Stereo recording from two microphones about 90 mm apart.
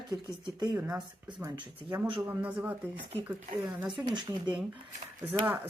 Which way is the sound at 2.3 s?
15° right (ahead or behind).